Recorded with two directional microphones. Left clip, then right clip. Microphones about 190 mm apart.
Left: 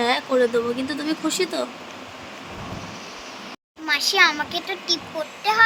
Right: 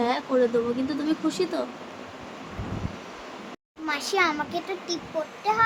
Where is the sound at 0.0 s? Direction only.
30° left (ahead or behind).